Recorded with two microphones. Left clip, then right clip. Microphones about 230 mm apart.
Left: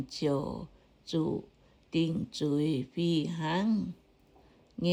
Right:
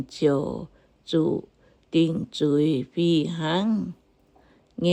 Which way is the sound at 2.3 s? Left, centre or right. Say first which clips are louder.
Right 9 dB; right.